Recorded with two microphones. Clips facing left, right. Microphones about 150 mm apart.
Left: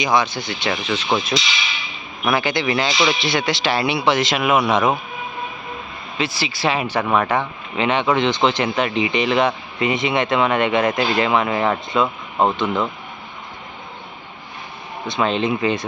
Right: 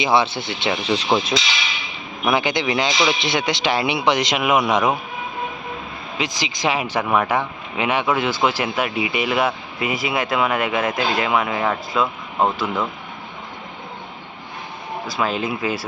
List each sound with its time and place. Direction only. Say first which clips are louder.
0.0 s speech: right 1 dB; 25° right (ahead or behind)
1.3 s a man's voice: even; 10° right (ahead or behind)
2.2 s a man's voice: even; 20° right (ahead or behind)
6.1 s a man's voice: left 2 dB; 15° right (ahead or behind)
15.0 s speech: left 4 dB; 5° right (ahead or behind)